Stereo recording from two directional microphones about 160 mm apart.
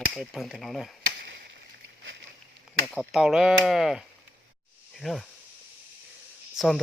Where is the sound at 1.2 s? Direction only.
90° right.